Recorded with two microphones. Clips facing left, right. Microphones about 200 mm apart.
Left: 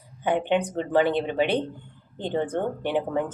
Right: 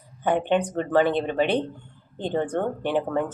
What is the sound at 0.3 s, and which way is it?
Speech, 15° left (ahead or behind).